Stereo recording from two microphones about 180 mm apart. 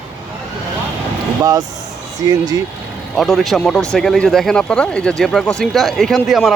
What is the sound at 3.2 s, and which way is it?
Speech, centre (ahead or behind).